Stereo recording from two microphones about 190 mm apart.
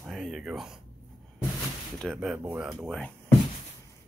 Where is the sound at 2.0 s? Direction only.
Centre (ahead or behind).